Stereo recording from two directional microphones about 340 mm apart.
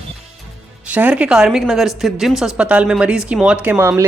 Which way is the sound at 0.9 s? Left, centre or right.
Centre.